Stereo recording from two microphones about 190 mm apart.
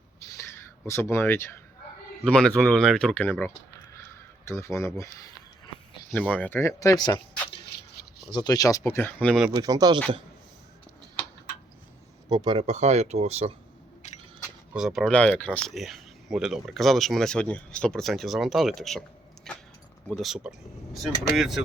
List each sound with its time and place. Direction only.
0.2 s a sound: 15° left (ahead or behind)
2.2 s speech: 5° left (ahead or behind)
6.1 s speech: 10° left (ahead or behind)
8.3 s speech: 20° left (ahead or behind)
9.2 s speech: centre (ahead or behind)
9.5 s speech: 20° right (ahead or behind)
12.3 s speech: 25° right (ahead or behind)
12.6 s speech: 35° right (ahead or behind)
14.7 s speech: 5° right (ahead or behind)
19.5 s a sound: centre (ahead or behind)
20.1 s speech: centre (ahead or behind)